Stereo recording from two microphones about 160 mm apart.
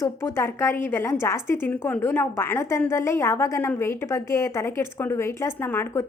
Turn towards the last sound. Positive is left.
turn(degrees=15)  # may be behind; listen again after turning